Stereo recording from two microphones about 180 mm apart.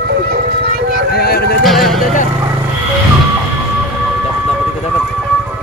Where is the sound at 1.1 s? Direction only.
60° left (ahead or behind).